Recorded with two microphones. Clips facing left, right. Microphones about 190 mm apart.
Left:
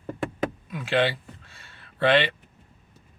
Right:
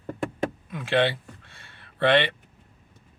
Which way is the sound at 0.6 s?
55° right (ahead or behind).